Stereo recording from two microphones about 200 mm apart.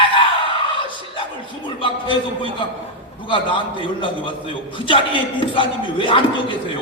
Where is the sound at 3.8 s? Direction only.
25° left (ahead or behind).